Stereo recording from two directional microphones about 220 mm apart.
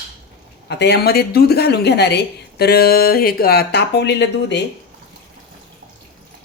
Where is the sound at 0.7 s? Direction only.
50° left (ahead or behind).